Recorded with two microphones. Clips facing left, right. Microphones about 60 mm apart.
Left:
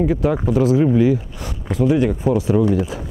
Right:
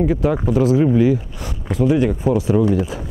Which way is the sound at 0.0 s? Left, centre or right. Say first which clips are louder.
Even; right.